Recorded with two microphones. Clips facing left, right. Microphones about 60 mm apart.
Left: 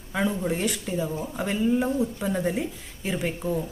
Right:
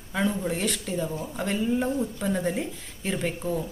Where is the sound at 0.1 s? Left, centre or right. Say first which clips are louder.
Left 1 dB; centre.